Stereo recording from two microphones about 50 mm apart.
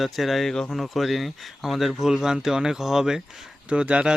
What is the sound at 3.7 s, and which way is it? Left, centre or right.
Speech, right.